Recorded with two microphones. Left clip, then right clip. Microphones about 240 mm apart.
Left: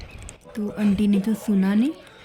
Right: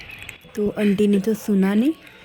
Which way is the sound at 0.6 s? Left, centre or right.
Centre.